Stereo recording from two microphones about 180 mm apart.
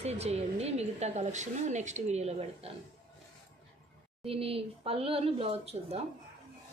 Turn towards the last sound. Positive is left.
turn(degrees=-35)  # may be behind; listen again after turning